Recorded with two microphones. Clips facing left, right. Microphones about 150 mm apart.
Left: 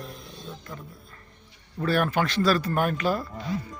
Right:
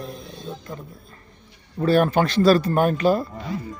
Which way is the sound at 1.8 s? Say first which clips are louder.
Right 6 dB; 25° right (ahead or behind).